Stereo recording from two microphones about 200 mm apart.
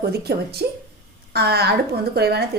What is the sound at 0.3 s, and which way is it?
A woman's voice, 55° right (ahead or behind).